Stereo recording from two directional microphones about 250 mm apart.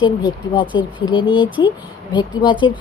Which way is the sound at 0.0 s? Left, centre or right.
Centre.